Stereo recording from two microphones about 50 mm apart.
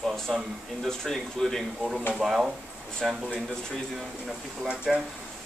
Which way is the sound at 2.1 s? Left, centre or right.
Centre.